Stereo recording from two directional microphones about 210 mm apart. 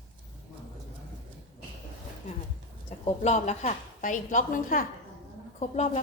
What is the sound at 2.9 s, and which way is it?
A woman's voice, 30° left (ahead or behind).